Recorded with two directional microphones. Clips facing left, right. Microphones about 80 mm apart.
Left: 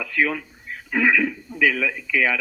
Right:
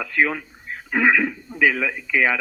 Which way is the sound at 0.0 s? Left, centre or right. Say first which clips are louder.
Right 1 dB; right.